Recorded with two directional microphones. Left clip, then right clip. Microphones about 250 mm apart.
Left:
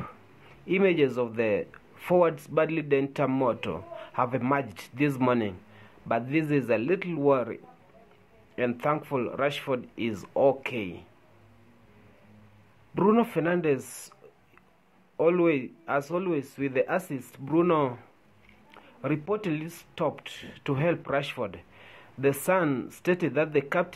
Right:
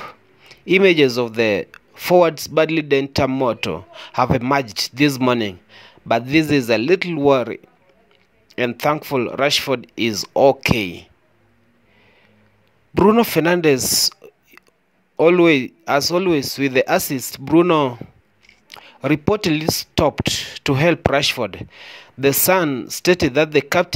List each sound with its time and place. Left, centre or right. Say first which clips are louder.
0.0 s speech: right 8 dB; right
12.9 s speech: right 10 dB; right
15.1 s speech: right 10 dB; right
18.7 s a sound: right 11 dB; right
20.6 s speech: right 11 dB; right